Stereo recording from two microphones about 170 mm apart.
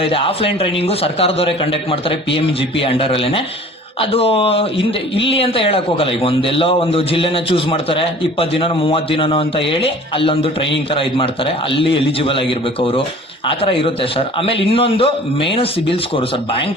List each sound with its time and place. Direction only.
0.0 s a man's voice: 30° left (ahead or behind)